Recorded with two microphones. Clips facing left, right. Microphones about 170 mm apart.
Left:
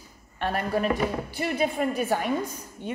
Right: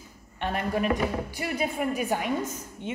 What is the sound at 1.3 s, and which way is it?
Speech, 30° left (ahead or behind).